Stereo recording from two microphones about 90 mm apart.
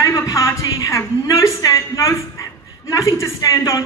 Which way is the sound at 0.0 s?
40° left (ahead or behind).